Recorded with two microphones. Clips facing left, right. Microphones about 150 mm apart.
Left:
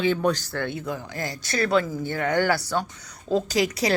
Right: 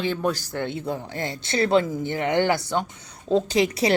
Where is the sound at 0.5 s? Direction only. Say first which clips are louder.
Right 1 dB; 25° right (ahead or behind).